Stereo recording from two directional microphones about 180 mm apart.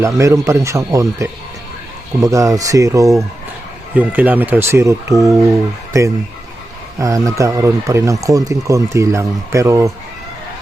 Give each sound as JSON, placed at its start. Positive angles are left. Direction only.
{"t": 0.0, "sound": "speech", "side_deg": -15}
{"t": 5.1, "sound": "speech", "side_deg": 0}
{"t": 5.9, "sound": "speech", "side_deg": -15}